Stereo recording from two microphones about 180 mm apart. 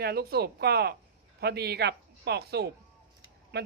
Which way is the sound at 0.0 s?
60° right (ahead or behind).